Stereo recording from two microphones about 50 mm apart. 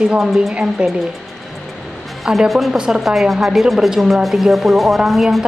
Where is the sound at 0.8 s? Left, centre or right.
Centre.